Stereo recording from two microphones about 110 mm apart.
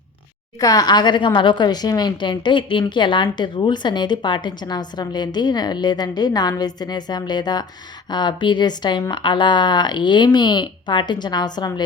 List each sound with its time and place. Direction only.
0.6 s a woman's voice: 35° left (ahead or behind)